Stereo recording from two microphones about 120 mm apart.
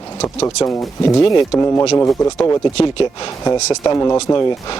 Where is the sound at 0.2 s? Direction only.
25° left (ahead or behind).